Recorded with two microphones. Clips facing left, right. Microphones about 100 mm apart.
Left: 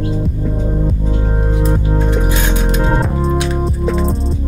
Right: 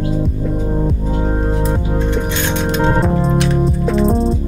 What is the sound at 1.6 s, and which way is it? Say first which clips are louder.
Music: left 1 dB; 5° left (ahead or behind).